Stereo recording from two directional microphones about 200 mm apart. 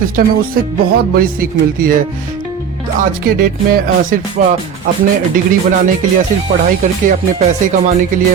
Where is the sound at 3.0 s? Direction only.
45° right (ahead or behind).